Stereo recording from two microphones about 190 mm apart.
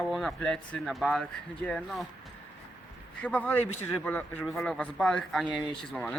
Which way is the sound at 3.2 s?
10° left (ahead or behind).